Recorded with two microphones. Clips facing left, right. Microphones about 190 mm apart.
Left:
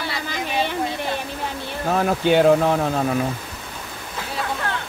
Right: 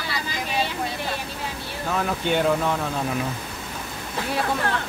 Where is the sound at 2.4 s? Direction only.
45° left (ahead or behind).